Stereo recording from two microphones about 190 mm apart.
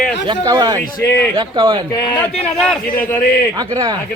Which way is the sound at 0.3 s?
20° right (ahead or behind).